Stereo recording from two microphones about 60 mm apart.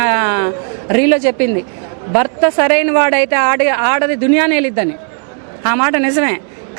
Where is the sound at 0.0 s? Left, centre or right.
Right.